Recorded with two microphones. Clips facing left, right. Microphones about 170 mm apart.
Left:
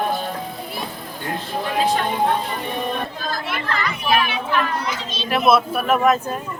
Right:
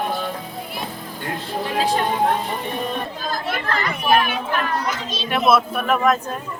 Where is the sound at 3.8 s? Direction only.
50° right (ahead or behind).